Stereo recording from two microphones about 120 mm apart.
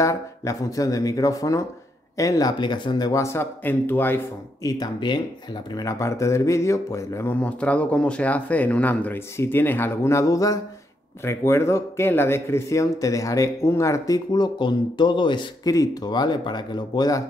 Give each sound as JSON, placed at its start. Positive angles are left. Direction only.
{"t": 0.0, "sound": "speech", "side_deg": 25}
{"t": 4.6, "sound": "speech", "side_deg": 35}
{"t": 7.3, "sound": "speech", "side_deg": 10}